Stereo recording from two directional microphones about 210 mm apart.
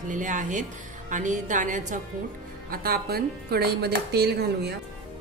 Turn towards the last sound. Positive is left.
turn(degrees=-50)  # may be behind; listen again after turning